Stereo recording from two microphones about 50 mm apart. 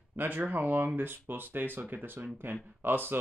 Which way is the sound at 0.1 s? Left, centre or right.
Right.